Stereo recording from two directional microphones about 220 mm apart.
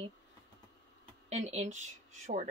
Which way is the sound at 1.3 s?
30° right (ahead or behind).